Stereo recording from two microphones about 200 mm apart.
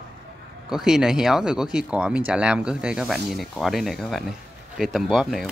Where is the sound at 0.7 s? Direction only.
Centre (ahead or behind).